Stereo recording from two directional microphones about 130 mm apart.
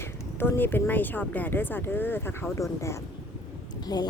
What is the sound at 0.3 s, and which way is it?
A woman's voice, 15° left (ahead or behind).